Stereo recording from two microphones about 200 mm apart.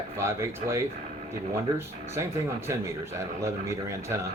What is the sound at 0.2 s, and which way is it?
Speech, 15° right (ahead or behind).